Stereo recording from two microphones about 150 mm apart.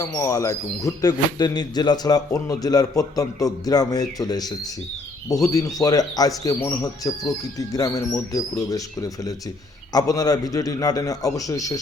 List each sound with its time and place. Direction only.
0.0 s speech: 20° left (ahead or behind)